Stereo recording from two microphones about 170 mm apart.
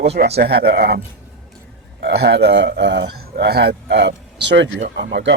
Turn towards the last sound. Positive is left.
turn(degrees=-85)